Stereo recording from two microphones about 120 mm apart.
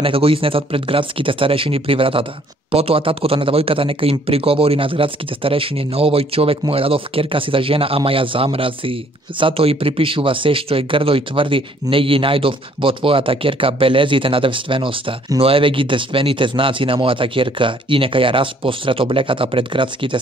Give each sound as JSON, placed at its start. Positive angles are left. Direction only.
{"t": 0.0, "sound": "speech", "side_deg": -50}